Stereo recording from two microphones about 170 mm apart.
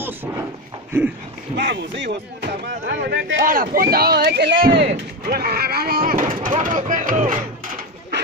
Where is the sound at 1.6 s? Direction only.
85° right.